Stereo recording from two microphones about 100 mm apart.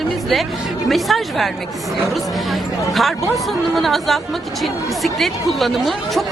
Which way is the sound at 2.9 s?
Centre (ahead or behind).